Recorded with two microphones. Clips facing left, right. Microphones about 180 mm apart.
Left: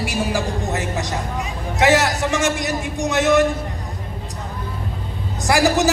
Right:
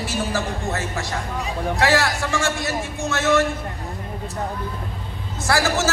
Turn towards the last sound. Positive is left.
turn(degrees=15)  # may be behind; listen again after turning